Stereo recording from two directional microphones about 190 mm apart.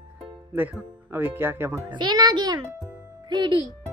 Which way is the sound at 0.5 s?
10° right (ahead or behind).